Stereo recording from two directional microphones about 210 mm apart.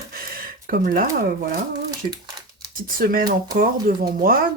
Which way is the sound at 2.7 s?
45° right (ahead or behind).